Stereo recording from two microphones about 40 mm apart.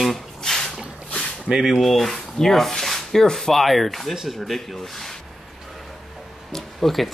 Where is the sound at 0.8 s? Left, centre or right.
Centre.